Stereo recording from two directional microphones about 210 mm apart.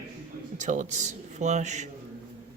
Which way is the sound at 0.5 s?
35° right (ahead or behind).